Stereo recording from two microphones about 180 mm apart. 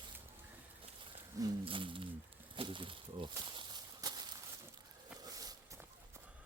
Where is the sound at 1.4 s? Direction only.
25° right (ahead or behind).